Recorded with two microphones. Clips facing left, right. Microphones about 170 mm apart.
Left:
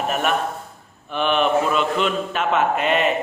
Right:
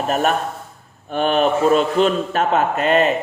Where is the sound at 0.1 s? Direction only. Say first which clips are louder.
Right 6 dB; 35° right (ahead or behind).